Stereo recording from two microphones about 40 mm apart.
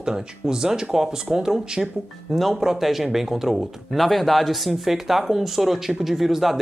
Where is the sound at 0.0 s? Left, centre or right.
Centre.